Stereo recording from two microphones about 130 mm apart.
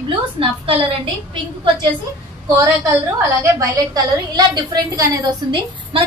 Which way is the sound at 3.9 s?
35° right (ahead or behind).